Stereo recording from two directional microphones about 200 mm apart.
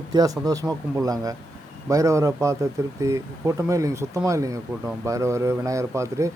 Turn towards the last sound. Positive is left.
turn(degrees=-15)  # may be behind; listen again after turning